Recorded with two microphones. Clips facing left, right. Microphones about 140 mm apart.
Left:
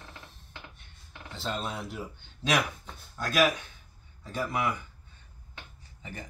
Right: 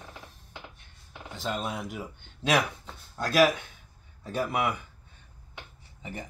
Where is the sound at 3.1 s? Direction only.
30° right (ahead or behind).